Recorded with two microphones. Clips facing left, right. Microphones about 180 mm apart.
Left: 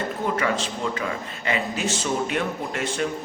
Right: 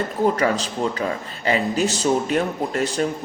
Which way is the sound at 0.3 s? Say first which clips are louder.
Right 4 dB; 40° right (ahead or behind).